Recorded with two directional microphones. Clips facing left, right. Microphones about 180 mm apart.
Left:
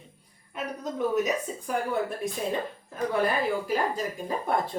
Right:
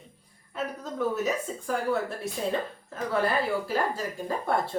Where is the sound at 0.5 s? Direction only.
15° left (ahead or behind).